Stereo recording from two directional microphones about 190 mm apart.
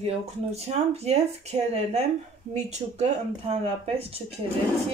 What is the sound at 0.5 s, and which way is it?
Speech, 35° right (ahead or behind).